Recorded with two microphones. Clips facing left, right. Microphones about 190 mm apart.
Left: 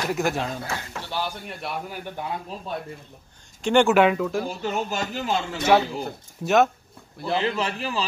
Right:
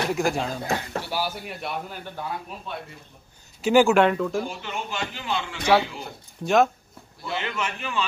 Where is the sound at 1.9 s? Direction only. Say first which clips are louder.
Left 2 dB; 15° left (ahead or behind).